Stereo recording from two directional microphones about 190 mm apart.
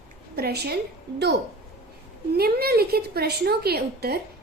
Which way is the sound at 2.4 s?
55° right (ahead or behind).